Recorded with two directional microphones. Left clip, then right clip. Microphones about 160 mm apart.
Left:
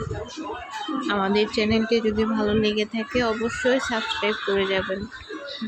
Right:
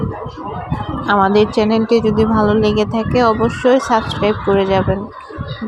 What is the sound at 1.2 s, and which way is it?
Speech, 30° right (ahead or behind).